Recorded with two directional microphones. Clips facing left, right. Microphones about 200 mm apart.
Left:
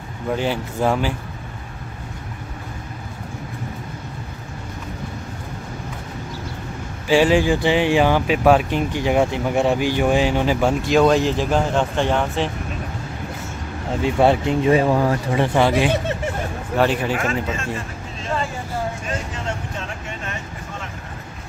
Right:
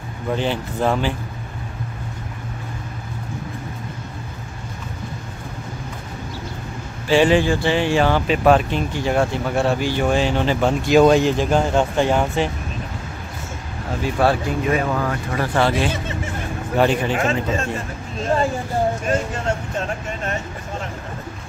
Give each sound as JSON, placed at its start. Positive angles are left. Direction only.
{"t": 0.4, "sound": "speech", "side_deg": 10}
{"t": 7.1, "sound": "speech", "side_deg": 10}
{"t": 14.0, "sound": "speech", "side_deg": 25}
{"t": 16.7, "sound": "speech", "side_deg": 0}
{"t": 17.1, "sound": "speech", "side_deg": -25}
{"t": 18.2, "sound": "vehicle", "side_deg": -40}